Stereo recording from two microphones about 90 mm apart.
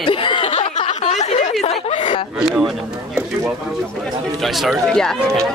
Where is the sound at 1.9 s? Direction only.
70° left (ahead or behind).